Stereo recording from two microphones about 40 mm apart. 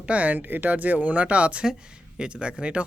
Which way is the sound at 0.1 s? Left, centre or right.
Right.